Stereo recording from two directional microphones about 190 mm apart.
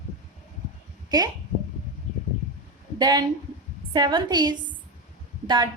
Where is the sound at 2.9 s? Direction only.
20° right (ahead or behind).